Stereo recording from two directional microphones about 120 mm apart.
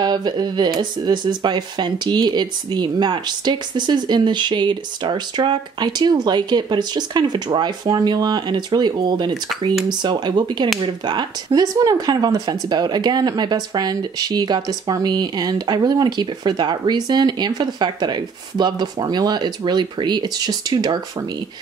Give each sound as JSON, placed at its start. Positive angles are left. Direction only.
{"t": 0.0, "sound": "speech", "side_deg": -35}